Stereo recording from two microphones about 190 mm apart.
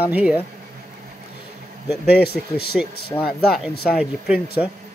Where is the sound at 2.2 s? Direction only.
55° left (ahead or behind).